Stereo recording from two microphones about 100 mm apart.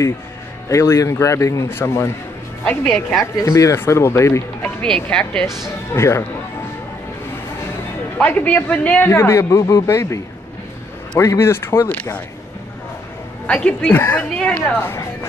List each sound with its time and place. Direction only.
0.7 s a man's voice: 30° left (ahead or behind)
2.9 s a woman's voice: 5° left (ahead or behind)
3.4 s a man's voice: 30° left (ahead or behind)
4.8 s a woman's voice: 5° left (ahead or behind)
5.9 s a man's voice: 25° left (ahead or behind)
8.2 s a man's voice: 15° left (ahead or behind)
13.5 s a woman's voice: 10° left (ahead or behind)